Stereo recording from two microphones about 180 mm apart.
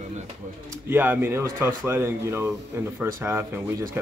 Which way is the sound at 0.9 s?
10° right (ahead or behind).